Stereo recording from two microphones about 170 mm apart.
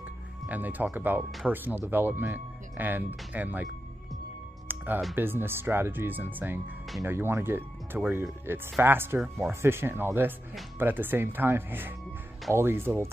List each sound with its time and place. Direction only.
0.5 s speech: 10° right (ahead or behind)
4.6 s music: 10° right (ahead or behind)
5.1 s speech: 10° right (ahead or behind)